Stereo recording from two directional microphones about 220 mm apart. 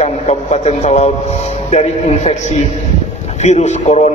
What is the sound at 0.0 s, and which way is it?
A man's voice, 30° left (ahead or behind).